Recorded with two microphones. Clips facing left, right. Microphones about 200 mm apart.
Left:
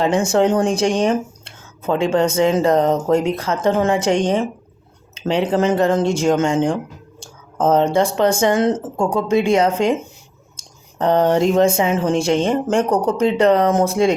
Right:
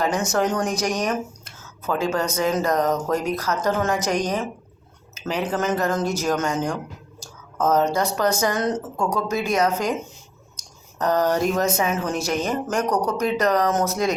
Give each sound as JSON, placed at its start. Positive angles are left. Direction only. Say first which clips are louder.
{"t": 0.0, "sound": "speech", "louder": "left 6 dB", "side_deg": 30}